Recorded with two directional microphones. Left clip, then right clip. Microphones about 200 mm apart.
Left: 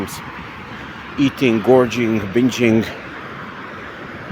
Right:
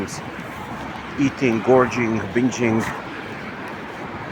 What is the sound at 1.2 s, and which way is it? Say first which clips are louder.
Speech: left 4 dB; 40° left (ahead or behind).